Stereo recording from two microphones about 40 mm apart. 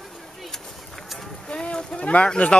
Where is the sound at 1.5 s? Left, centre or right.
Left.